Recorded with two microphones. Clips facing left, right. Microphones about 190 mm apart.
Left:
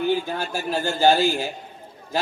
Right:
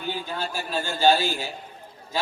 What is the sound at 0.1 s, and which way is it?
A man's voice, 50° left (ahead or behind).